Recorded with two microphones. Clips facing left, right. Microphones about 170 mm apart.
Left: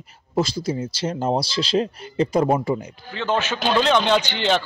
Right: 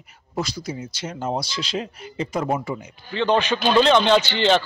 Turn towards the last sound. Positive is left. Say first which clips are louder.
# right 2 dB
turn(degrees=15)  # may be behind; listen again after turning